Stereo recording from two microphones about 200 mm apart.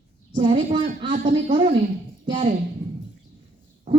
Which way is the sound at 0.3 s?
25° right (ahead or behind).